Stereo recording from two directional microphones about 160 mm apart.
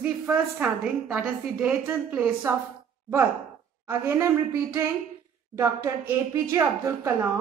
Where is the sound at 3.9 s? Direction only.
15° right (ahead or behind).